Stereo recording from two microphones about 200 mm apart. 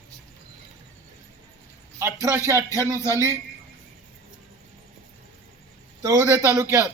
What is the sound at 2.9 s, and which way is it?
Speech, 15° left (ahead or behind).